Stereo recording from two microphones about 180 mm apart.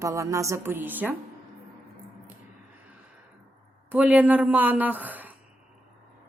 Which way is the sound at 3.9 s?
10° right (ahead or behind).